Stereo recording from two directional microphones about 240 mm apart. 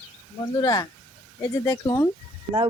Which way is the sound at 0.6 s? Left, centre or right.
Centre.